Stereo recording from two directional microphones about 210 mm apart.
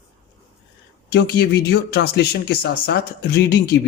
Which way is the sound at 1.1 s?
50° left (ahead or behind).